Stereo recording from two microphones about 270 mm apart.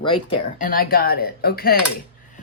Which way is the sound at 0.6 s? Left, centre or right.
Left.